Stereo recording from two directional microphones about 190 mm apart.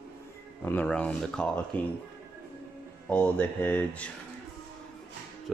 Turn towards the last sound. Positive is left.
turn(degrees=10)  # may be behind; listen again after turning